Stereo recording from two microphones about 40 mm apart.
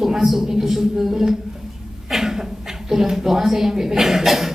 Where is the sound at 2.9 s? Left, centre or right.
Centre.